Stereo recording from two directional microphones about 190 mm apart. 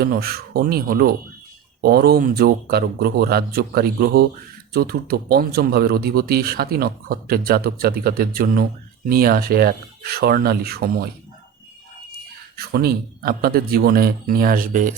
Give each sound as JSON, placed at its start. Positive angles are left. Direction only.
{"t": 0.0, "sound": "speech", "side_deg": -55}
{"t": 12.5, "sound": "speech", "side_deg": -55}